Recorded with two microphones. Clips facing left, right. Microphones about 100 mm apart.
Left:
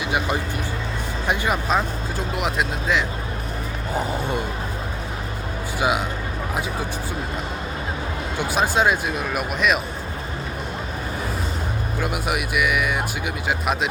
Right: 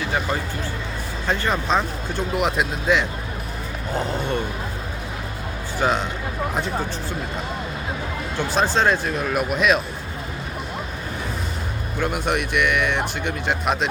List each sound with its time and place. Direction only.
0.0 s music: 15° left (ahead or behind)
1.3 s speech: 10° left (ahead or behind)
5.8 s speech: 10° left (ahead or behind)
8.4 s speech: 10° left (ahead or behind)
11.9 s speech: 5° left (ahead or behind)